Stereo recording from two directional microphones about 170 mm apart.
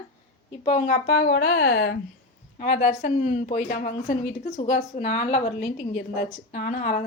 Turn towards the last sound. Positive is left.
turn(degrees=50)  # may be behind; listen again after turning